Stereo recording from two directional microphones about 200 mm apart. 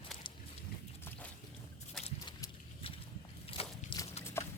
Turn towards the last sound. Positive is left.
turn(degrees=25)  # may be behind; listen again after turning